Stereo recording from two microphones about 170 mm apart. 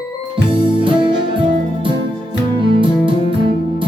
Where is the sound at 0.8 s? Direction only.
30° right (ahead or behind).